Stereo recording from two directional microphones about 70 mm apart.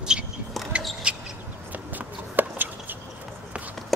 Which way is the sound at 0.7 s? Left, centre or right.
Centre.